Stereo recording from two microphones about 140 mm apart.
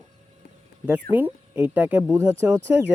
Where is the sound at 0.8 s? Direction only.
10° right (ahead or behind).